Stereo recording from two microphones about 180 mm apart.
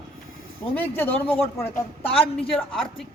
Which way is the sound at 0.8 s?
10° left (ahead or behind).